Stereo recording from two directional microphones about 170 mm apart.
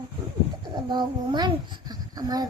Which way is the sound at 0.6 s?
25° right (ahead or behind).